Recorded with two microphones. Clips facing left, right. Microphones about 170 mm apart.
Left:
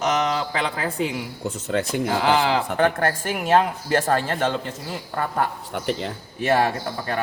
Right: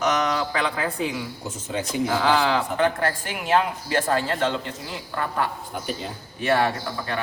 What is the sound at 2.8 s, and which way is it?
Speech, 50° left (ahead or behind).